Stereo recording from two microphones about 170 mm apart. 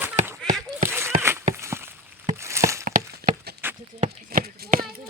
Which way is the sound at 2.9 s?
50° right (ahead or behind).